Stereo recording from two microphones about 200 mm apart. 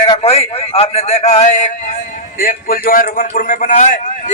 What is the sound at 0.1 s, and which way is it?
A man's voice, 30° left (ahead or behind).